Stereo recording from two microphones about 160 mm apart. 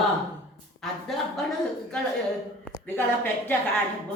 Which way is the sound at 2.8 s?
15° left (ahead or behind).